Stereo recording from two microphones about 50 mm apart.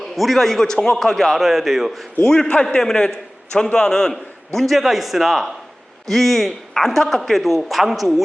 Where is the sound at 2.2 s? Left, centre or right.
Centre.